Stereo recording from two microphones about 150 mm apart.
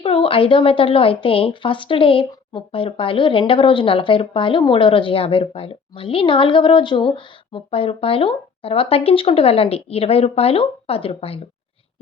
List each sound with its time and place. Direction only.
0.0 s a woman's voice: 35° left (ahead or behind)